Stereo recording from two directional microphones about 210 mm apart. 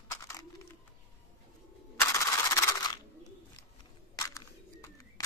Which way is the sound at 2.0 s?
15° left (ahead or behind).